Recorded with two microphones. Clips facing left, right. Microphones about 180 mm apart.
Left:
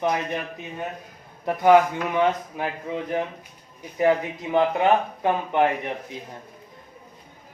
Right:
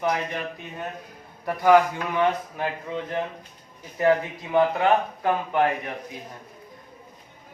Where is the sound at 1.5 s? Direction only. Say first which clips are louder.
Left 1 dB; 20° left (ahead or behind).